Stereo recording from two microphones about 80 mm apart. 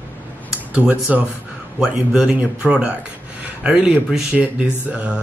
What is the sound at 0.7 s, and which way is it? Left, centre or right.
Speech, centre.